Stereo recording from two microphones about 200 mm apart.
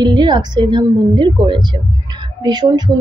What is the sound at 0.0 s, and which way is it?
A woman's voice, 20° right (ahead or behind).